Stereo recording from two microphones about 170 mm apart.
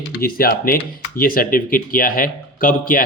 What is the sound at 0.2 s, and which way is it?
Speech, 60° left (ahead or behind).